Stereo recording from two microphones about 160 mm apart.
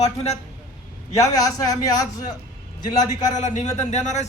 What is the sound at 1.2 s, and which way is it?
A man's voice, 20° left (ahead or behind).